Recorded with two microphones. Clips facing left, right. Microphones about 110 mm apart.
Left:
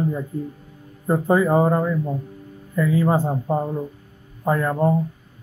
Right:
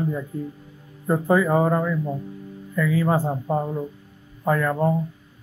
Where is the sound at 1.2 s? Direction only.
25° left (ahead or behind).